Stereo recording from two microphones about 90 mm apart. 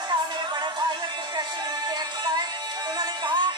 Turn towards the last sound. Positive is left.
turn(degrees=-60)  # may be behind; listen again after turning